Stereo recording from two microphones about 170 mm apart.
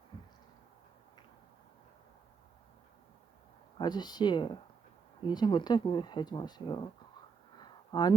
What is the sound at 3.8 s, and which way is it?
Speech, 25° left (ahead or behind).